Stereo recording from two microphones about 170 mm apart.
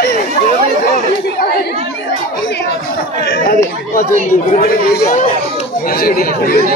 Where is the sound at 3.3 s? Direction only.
60° left (ahead or behind).